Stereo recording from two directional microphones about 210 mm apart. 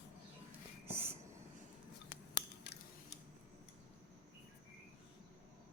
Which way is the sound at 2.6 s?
55° left (ahead or behind).